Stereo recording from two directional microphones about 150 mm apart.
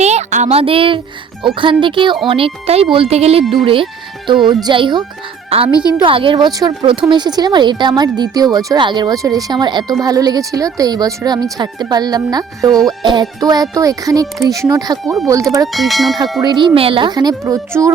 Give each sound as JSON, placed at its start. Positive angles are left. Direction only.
{"t": 0.0, "sound": "a woman's voice", "side_deg": -50}
{"t": 15.0, "sound": "bell", "side_deg": 0}
{"t": 15.3, "sound": "speech", "side_deg": -20}
{"t": 15.7, "sound": "bell", "side_deg": 0}
{"t": 16.4, "sound": "speech", "side_deg": -30}